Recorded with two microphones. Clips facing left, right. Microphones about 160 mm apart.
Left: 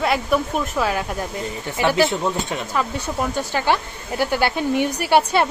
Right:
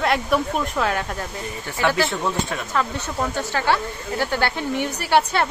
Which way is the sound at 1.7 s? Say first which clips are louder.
Left 3 dB; 15° left (ahead or behind).